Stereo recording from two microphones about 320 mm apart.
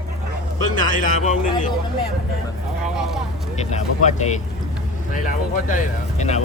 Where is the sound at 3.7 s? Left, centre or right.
Left.